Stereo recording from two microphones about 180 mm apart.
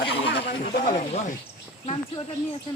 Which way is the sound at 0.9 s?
40° left (ahead or behind).